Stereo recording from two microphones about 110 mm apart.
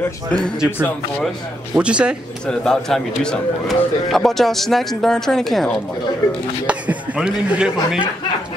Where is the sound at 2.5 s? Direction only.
5° left (ahead or behind).